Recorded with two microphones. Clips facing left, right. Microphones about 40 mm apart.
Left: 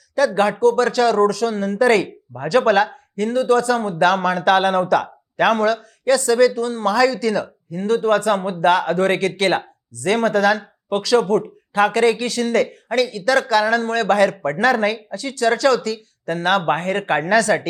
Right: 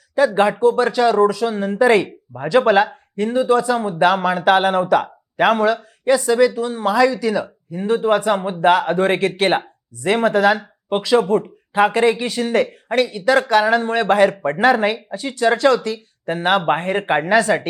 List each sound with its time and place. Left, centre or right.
0.2 s a man's voice: right